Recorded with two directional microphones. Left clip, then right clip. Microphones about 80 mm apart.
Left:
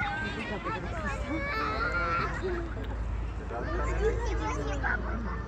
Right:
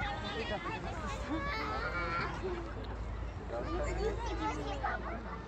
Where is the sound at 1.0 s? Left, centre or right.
Left.